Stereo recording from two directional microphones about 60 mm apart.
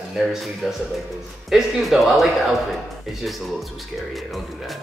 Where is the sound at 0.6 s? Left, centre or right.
Centre.